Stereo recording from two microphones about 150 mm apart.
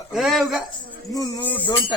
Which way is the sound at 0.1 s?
Centre (ahead or behind).